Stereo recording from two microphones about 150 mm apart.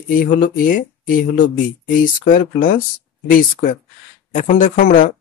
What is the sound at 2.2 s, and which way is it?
Speech, 60° left (ahead or behind).